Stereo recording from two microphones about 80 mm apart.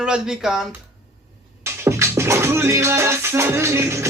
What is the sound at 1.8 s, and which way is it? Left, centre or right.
Music, right.